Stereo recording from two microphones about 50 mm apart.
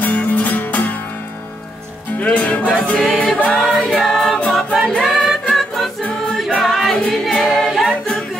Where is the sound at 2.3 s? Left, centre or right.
Left.